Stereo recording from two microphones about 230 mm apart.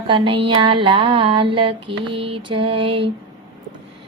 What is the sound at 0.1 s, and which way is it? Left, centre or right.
Mantra, right.